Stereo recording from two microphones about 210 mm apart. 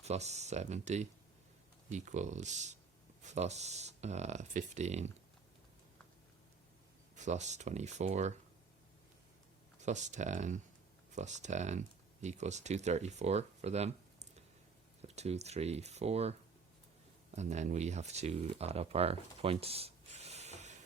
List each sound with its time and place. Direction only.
0.0 s speech: 30° right (ahead or behind)
7.2 s speech: 35° right (ahead or behind)
9.8 s speech: 35° right (ahead or behind)
17.3 s speech: 35° right (ahead or behind)